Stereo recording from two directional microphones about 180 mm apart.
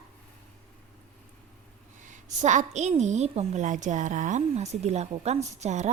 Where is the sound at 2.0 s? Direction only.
45° right (ahead or behind).